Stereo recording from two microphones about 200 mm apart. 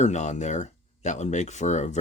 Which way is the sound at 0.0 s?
35° left (ahead or behind).